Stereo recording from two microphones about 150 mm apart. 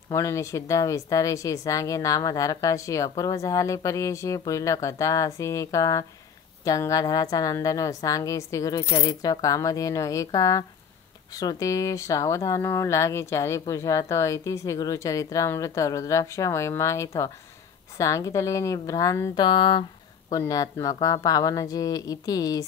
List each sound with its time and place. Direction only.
0.1 s speech: 20° left (ahead or behind)